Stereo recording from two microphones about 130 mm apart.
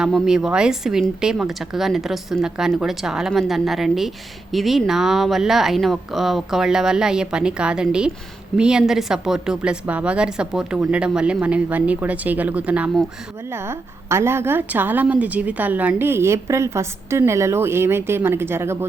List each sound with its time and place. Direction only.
0.0 s a woman's voice: 5° right (ahead or behind)